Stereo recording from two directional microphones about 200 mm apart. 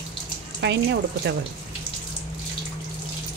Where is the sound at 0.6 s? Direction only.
60° right (ahead or behind).